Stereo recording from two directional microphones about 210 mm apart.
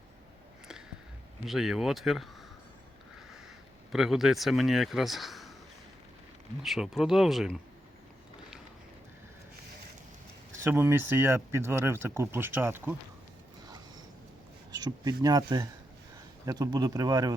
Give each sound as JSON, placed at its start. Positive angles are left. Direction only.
{"t": 1.5, "sound": "speech", "side_deg": 0}
{"t": 3.9, "sound": "speech", "side_deg": 0}
{"t": 6.6, "sound": "speech", "side_deg": 0}
{"t": 10.6, "sound": "speech", "side_deg": -10}
{"t": 14.7, "sound": "speech", "side_deg": -20}